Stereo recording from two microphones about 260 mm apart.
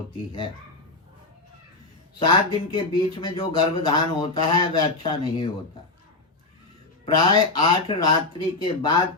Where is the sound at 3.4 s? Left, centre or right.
Centre.